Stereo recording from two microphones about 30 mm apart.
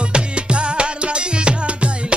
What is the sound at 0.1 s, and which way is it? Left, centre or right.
Music, right.